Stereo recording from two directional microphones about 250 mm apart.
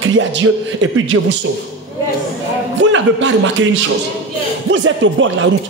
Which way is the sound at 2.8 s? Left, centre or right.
Right.